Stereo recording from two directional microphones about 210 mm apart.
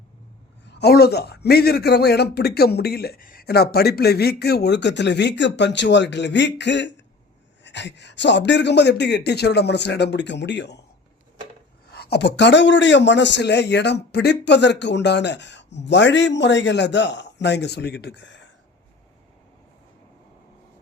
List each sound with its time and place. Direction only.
0.6 s a man's voice: 55° left (ahead or behind)
11.9 s a man's voice: 50° left (ahead or behind)